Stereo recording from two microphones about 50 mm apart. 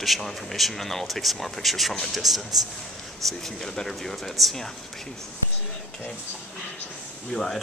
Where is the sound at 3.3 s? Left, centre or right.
Centre.